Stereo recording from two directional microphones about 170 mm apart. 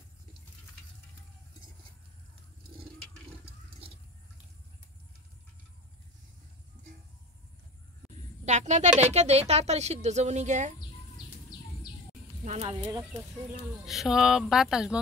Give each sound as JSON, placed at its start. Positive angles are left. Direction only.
{"t": 8.5, "sound": "a woman's voice", "side_deg": -45}
{"t": 12.4, "sound": "speech", "side_deg": -45}
{"t": 12.8, "sound": "speech", "side_deg": -20}
{"t": 13.8, "sound": "speech", "side_deg": 0}